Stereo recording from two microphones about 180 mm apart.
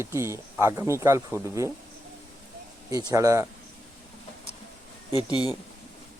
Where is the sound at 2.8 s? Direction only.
20° right (ahead or behind).